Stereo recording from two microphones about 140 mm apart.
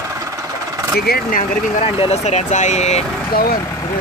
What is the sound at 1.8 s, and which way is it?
Speech, 45° left (ahead or behind).